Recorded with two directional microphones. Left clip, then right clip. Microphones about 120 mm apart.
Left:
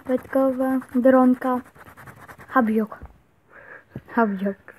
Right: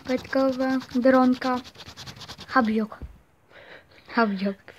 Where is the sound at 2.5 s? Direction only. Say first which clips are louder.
Left 2 dB; 35° left (ahead or behind).